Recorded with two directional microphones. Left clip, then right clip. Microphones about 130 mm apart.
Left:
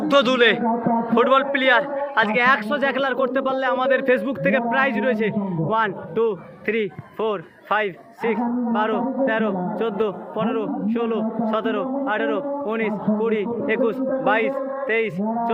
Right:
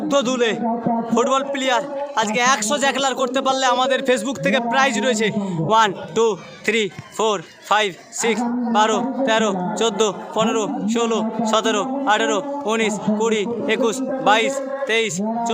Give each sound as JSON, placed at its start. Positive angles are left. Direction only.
{"t": 0.1, "sound": "a man's voice", "side_deg": -25}